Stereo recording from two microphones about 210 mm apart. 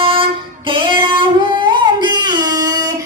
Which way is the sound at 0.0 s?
25° right (ahead or behind).